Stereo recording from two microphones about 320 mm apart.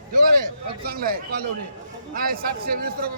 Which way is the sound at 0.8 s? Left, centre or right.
Right.